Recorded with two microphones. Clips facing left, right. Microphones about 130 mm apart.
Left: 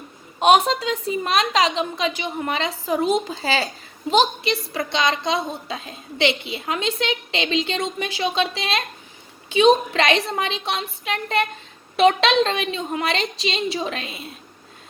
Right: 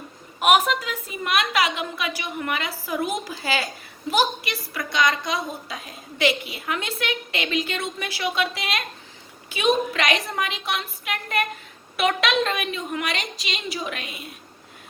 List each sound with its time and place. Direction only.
0.3 s a woman's voice: 30° left (ahead or behind)